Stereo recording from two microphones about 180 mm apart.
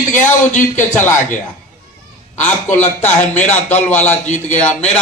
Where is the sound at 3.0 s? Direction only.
10° left (ahead or behind).